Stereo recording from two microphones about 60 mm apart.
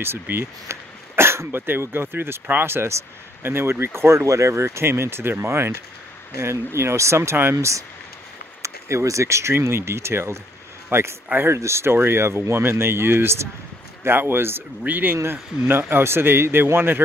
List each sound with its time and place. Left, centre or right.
0.0 s speech: right
7.5 s speech: right
14.8 s speech: right
15.9 s speech: right